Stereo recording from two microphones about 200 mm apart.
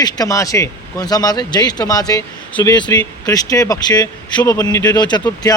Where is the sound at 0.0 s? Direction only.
15° left (ahead or behind).